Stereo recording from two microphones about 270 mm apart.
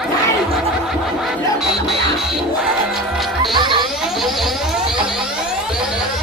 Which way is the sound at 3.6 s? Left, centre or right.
Centre.